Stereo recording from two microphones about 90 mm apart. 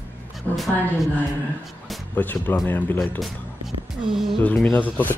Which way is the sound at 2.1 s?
20° left (ahead or behind).